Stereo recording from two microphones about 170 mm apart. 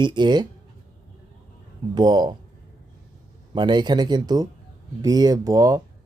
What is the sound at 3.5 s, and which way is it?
Speech, 25° right (ahead or behind).